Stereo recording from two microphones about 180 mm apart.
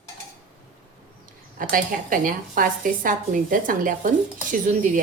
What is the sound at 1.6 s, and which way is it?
A woman's voice, 50° right (ahead or behind).